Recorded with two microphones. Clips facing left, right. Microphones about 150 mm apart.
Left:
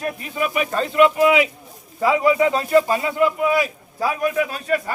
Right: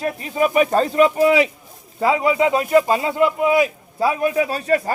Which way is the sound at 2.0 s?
25° right (ahead or behind).